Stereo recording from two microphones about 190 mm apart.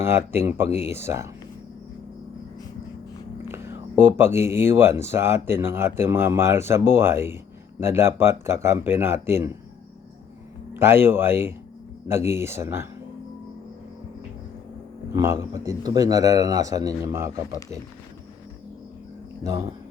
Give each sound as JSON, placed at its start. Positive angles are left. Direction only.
{"t": 0.0, "sound": "speech", "side_deg": -15}
{"t": 3.5, "sound": "a sound", "side_deg": -10}
{"t": 4.4, "sound": "speech", "side_deg": -15}
{"t": 10.8, "sound": "speech", "side_deg": -10}
{"t": 15.1, "sound": "speech", "side_deg": -15}
{"t": 19.4, "sound": "speech", "side_deg": -15}